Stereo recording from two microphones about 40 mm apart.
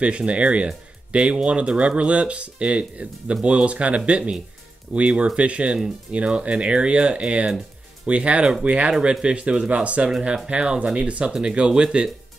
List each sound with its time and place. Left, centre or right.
0.0 s speech: right